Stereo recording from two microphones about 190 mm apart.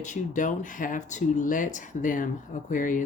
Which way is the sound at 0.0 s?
40° left (ahead or behind).